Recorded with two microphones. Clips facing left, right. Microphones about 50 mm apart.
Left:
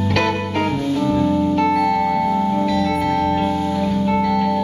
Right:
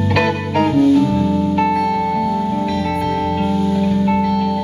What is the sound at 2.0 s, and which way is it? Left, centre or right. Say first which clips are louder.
Music: even; centre.